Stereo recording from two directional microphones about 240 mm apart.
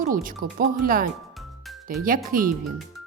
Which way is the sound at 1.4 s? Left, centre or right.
Centre.